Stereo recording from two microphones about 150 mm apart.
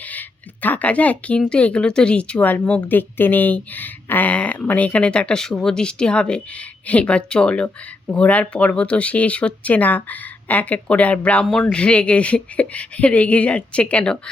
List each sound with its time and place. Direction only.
0.0 s speech: 10° left (ahead or behind)